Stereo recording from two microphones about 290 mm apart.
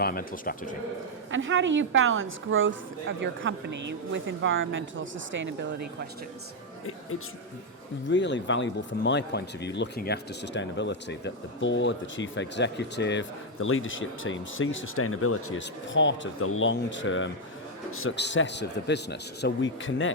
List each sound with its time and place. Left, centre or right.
0.0 s speech: left
1.3 s speech: right
8.0 s speech: left